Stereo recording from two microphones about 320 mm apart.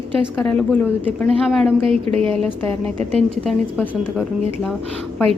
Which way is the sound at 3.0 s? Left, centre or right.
Centre.